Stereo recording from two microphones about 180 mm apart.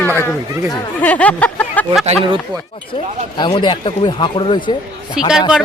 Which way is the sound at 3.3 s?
25° left (ahead or behind).